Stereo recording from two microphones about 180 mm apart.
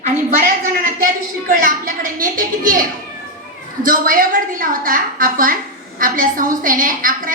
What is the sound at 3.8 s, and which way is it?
A woman's voice, 50° right (ahead or behind).